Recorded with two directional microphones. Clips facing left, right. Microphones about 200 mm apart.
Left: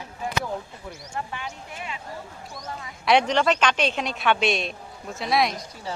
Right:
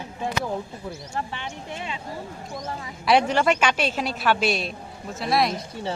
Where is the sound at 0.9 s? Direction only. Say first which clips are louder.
Even; 30° right (ahead or behind).